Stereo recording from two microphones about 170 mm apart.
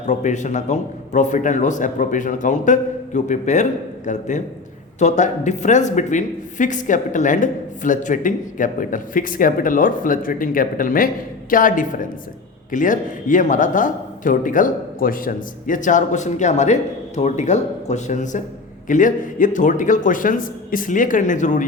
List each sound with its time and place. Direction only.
0.1 s a man's voice: 45° left (ahead or behind)